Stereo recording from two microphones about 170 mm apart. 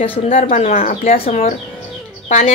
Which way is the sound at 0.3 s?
50° left (ahead or behind).